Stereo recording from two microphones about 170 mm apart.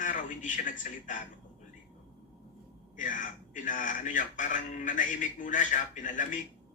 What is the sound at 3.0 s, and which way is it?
A man's voice, 50° left (ahead or behind).